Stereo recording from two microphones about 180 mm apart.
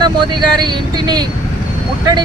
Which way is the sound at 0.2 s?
25° right (ahead or behind).